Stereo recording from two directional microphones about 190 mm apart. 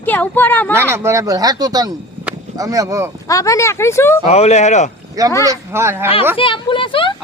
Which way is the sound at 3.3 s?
15° left (ahead or behind).